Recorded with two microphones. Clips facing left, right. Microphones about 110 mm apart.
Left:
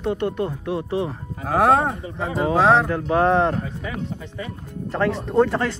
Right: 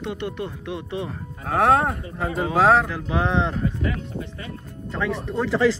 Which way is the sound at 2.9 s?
45° left (ahead or behind).